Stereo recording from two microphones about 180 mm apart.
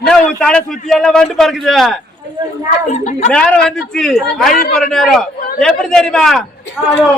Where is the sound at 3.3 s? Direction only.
5° left (ahead or behind).